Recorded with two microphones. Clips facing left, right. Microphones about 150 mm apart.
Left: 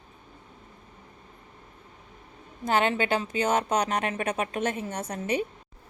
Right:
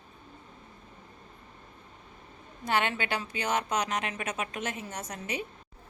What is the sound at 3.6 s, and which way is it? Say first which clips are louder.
A woman's voice: left 4 dB; 30° left (ahead or behind).